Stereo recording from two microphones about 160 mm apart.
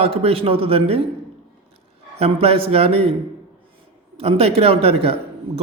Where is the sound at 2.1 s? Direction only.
40° right (ahead or behind).